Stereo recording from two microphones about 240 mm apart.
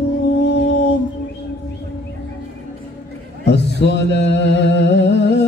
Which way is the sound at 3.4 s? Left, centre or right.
Left.